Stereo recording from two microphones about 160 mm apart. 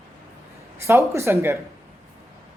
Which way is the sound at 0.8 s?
15° right (ahead or behind).